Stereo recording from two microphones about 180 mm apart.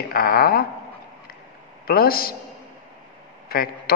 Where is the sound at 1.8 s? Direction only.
55° left (ahead or behind).